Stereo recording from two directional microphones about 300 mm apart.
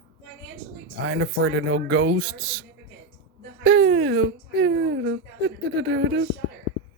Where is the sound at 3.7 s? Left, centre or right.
Right.